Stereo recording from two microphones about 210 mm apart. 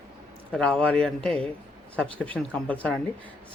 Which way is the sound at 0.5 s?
5° left (ahead or behind).